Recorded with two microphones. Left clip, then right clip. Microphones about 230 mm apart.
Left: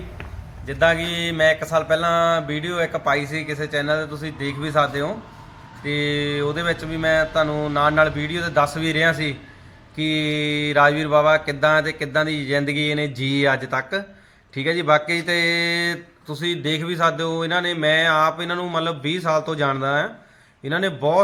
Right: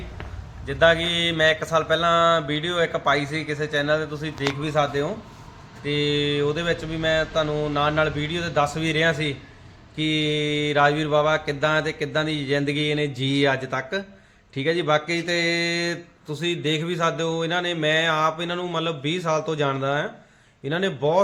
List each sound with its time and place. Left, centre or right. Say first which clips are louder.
0.7 s speech: even; centre